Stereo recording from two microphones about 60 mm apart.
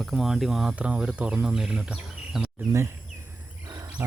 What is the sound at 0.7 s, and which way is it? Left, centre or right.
Speech, centre.